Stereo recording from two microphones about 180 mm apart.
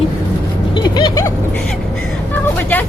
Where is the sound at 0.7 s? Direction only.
25° left (ahead or behind).